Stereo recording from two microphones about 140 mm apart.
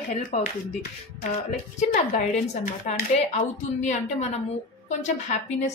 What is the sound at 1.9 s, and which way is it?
Speech, 65° left (ahead or behind).